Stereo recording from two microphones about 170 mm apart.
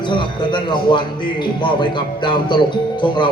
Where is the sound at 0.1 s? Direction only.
25° left (ahead or behind).